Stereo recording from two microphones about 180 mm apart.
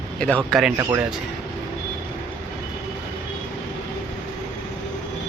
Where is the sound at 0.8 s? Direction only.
15° right (ahead or behind).